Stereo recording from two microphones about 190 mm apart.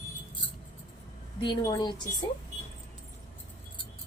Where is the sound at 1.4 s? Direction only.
20° left (ahead or behind).